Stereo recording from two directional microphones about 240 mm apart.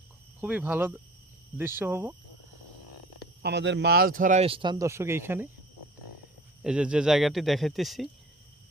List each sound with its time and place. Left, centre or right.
0.4 s speech: centre
3.4 s speech: right; by 5.5 s centre
6.6 s speech: centre